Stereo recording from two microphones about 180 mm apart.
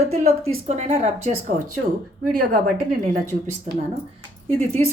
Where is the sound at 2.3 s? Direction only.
55° right (ahead or behind).